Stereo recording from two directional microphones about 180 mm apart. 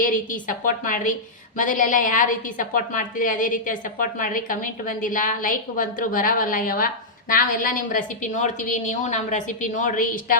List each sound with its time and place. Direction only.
0.0 s a woman's voice: 50° left (ahead or behind)